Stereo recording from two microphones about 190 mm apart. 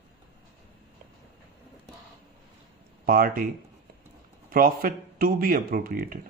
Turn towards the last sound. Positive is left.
turn(degrees=-50)  # may be behind; listen again after turning